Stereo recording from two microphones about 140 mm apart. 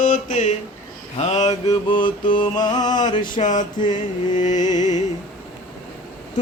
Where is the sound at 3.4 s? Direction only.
65° left (ahead or behind).